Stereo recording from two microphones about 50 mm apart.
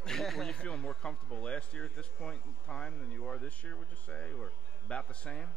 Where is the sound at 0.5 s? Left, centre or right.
Centre.